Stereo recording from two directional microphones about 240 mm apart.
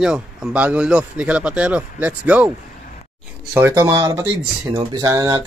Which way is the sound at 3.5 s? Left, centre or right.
Centre.